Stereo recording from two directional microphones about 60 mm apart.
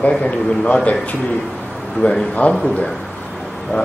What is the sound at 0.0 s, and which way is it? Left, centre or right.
Speech, left.